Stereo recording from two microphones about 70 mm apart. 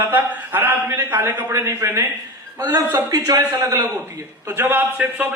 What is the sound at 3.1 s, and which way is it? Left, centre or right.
Speech, right.